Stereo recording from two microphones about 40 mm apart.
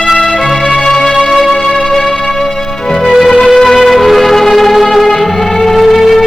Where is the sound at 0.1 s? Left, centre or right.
Centre.